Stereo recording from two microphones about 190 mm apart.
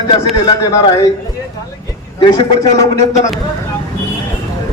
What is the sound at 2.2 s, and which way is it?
Speech, 25° left (ahead or behind).